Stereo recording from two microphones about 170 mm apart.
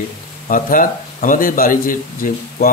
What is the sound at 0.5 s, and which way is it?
Speech, 50° left (ahead or behind).